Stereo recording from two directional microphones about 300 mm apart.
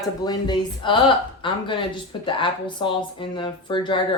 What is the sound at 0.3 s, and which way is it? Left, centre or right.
Speech, centre.